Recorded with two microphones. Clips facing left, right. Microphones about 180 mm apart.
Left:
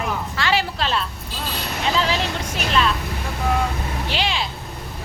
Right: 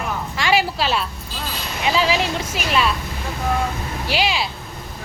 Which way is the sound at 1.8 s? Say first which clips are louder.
Right 3 dB; 10° right (ahead or behind).